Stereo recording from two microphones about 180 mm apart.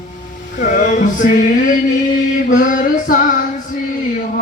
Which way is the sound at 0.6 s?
45° left (ahead or behind).